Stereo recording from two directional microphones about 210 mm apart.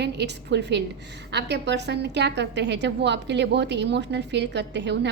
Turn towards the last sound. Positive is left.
turn(degrees=-55)  # may be behind; listen again after turning